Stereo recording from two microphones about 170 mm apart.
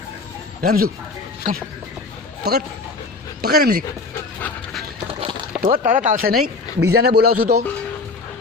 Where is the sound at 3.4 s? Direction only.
65° right (ahead or behind).